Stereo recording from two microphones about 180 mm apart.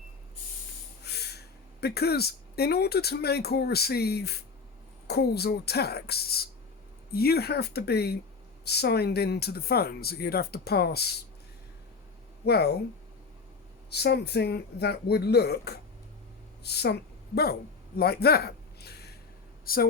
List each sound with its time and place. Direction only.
1.0 s speech: 65° left (ahead or behind)
12.5 s speech: 65° left (ahead or behind)
13.9 s a woman's voice: 65° left (ahead or behind)